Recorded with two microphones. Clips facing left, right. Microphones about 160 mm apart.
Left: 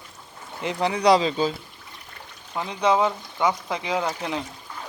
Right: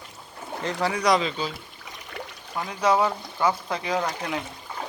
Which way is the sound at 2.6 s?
15° left (ahead or behind).